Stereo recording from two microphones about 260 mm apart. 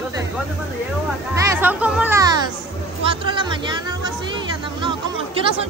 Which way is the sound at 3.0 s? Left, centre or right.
Centre.